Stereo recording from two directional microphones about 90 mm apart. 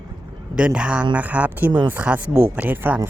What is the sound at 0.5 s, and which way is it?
Speech, 10° right (ahead or behind).